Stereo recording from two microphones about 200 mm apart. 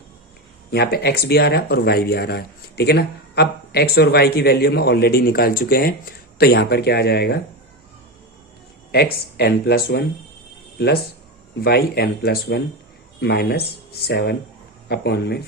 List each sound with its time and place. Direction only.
0.7 s speech: 50° left (ahead or behind)
8.9 s speech: 55° left (ahead or behind)